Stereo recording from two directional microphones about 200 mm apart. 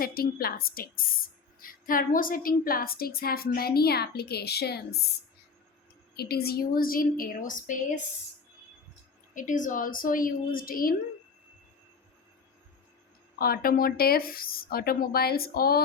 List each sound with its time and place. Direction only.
0.0 s a woman's voice: 50° left (ahead or behind)
6.1 s a woman's voice: 50° left (ahead or behind)
9.3 s a woman's voice: 40° left (ahead or behind)
13.4 s a woman's voice: 45° left (ahead or behind)